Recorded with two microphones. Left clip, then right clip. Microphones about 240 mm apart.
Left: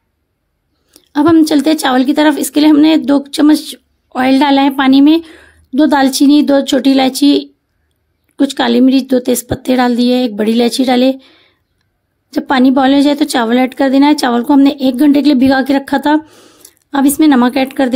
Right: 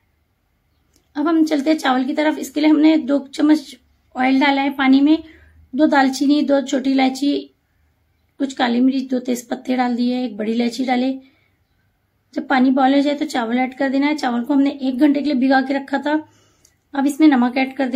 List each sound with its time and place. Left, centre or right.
0.9 s a woman's voice: left